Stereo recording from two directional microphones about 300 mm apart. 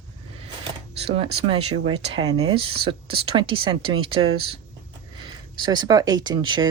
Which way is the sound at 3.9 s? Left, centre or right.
Right.